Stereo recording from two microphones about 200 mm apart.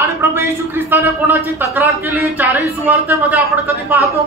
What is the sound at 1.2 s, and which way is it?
Speech, 10° right (ahead or behind).